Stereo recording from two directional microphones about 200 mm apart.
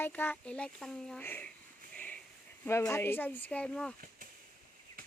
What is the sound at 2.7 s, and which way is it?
Speech, 15° left (ahead or behind).